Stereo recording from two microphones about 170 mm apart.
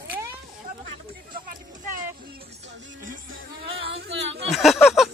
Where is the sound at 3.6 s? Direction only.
35° right (ahead or behind).